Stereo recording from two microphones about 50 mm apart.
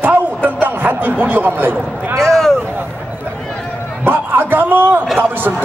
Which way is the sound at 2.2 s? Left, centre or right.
Centre.